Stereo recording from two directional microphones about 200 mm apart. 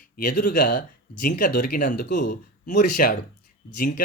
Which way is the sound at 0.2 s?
45° left (ahead or behind).